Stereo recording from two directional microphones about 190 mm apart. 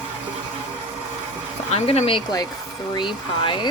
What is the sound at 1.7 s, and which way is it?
Speech, 30° left (ahead or behind).